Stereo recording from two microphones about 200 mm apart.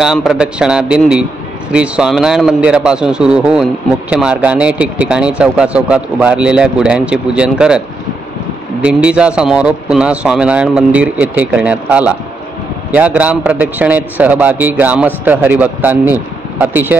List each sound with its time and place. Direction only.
0.0 s speech: centre (ahead or behind)
8.8 s a man's voice: 5° right (ahead or behind)